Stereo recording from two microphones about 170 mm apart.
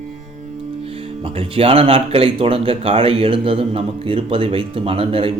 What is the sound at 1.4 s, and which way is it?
Speech, 35° right (ahead or behind).